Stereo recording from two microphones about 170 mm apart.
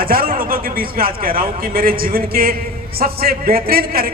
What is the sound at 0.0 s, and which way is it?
A man's voice, 55° right (ahead or behind).